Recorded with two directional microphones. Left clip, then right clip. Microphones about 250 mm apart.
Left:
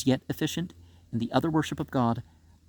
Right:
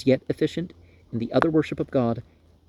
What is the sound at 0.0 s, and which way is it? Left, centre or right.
Speech, centre.